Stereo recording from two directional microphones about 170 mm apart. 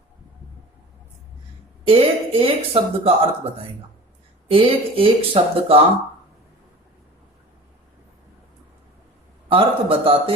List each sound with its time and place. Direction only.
1.9 s speech: 35° right (ahead or behind)
4.4 s speech: 30° right (ahead or behind)
9.5 s speech: 30° right (ahead or behind)